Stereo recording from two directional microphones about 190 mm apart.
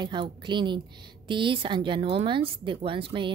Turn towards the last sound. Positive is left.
turn(degrees=-25)  # may be behind; listen again after turning